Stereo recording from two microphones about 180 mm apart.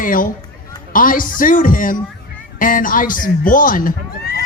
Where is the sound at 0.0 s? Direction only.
50° left (ahead or behind).